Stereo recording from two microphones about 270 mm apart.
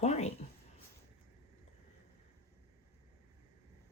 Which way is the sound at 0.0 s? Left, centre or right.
Left.